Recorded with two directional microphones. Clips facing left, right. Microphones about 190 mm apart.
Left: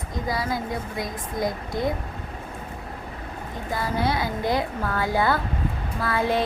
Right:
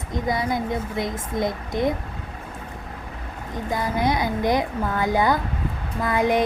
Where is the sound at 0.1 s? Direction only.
20° right (ahead or behind).